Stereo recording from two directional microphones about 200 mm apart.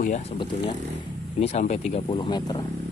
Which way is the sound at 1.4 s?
35° left (ahead or behind).